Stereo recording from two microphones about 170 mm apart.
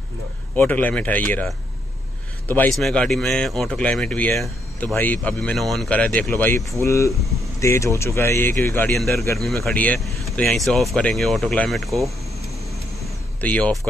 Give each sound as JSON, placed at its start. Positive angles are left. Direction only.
{"t": 0.6, "sound": "speech", "side_deg": 10}
{"t": 13.4, "sound": "speech", "side_deg": 10}